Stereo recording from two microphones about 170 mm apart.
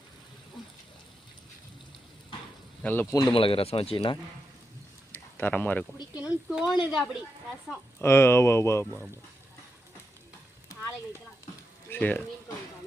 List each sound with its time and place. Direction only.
2.8 s speech: 10° left (ahead or behind)
3.3 s speech: 30° left (ahead or behind)
5.1 s a sound: 10° left (ahead or behind)
6.1 s speech: 5° right (ahead or behind)
7.9 s speech: 15° left (ahead or behind)
11.9 s speech: 10° left (ahead or behind)